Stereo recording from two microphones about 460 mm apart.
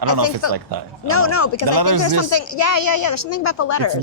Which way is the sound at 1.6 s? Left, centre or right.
Right.